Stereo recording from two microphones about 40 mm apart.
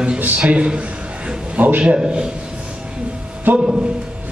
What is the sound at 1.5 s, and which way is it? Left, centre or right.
Speech, right.